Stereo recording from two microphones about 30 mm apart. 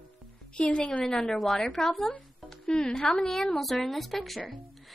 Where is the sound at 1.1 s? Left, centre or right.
Left.